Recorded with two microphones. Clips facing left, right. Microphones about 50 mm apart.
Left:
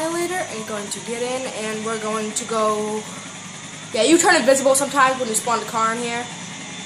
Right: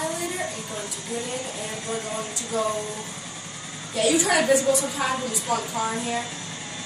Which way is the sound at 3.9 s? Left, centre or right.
Left.